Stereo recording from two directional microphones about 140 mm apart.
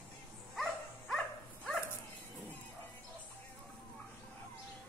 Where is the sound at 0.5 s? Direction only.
Centre (ahead or behind).